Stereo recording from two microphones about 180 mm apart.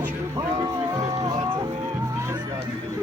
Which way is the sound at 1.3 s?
25° right (ahead or behind).